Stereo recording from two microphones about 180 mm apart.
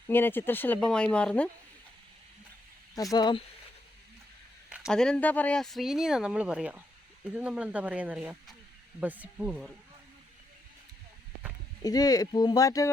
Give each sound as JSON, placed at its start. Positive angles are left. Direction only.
{"t": 0.1, "sound": "speech", "side_deg": 10}
{"t": 2.9, "sound": "speech", "side_deg": 20}
{"t": 4.7, "sound": "speech", "side_deg": 0}
{"t": 11.8, "sound": "speech", "side_deg": 20}